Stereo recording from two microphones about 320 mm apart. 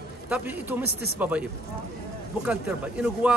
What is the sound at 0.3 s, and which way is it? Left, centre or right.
Speech, centre.